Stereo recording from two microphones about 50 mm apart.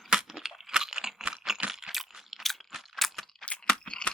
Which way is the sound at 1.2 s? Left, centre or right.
Centre.